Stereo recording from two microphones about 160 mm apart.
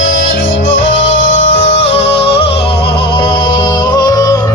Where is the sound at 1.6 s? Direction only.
40° left (ahead or behind).